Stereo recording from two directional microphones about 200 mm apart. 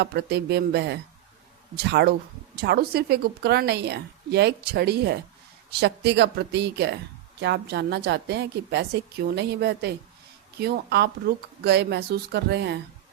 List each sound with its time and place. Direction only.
0.0 s speech: 55° right (ahead or behind)